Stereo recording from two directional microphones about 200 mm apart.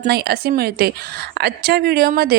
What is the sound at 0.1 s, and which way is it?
A woman's voice, 50° right (ahead or behind).